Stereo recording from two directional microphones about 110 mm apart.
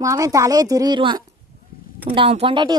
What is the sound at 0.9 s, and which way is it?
Speech, 50° right (ahead or behind).